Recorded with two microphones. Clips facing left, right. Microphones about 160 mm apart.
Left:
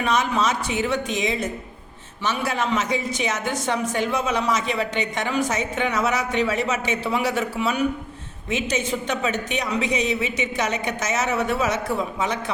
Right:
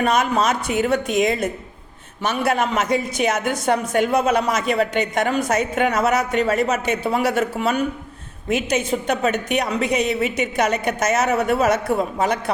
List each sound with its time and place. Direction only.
0.0 s a woman's voice: 55° right (ahead or behind)